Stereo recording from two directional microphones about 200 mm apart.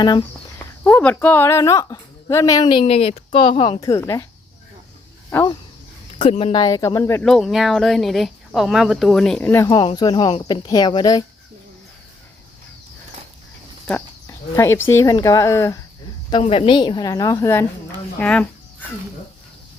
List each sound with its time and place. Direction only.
0.0 s speech: 20° left (ahead or behind)
0.9 s a woman's voice: 10° left (ahead or behind)
5.3 s a woman's voice: 10° left (ahead or behind)
6.3 s speech: 25° left (ahead or behind)
7.2 s speech: centre (ahead or behind)
9.6 s speech: 20° left (ahead or behind)
13.8 s speech: 10° left (ahead or behind)
16.3 s speech: 30° left (ahead or behind); by 18.4 s 5° left (ahead or behind)